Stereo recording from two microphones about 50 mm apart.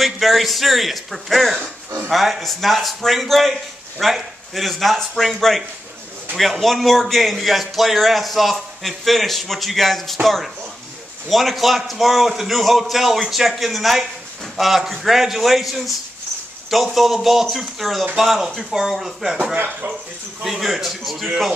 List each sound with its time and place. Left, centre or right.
0.0 s a man's voice: centre
19.5 s speech: right
20.4 s a man's voice: centre